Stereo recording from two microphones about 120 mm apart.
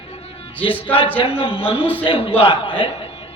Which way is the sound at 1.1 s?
50° left (ahead or behind).